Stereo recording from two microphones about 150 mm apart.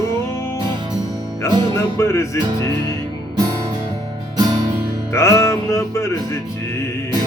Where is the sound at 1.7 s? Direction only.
20° left (ahead or behind).